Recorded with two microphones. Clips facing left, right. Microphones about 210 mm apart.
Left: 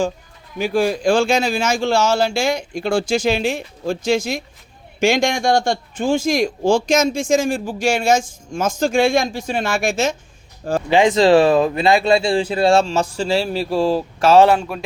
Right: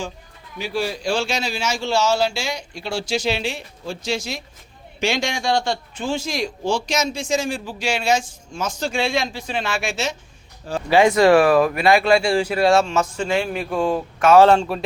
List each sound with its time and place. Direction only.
0.6 s a man's voice: 50° left (ahead or behind)
10.8 s speech: 20° left (ahead or behind)
14.4 s speech: 5° left (ahead or behind)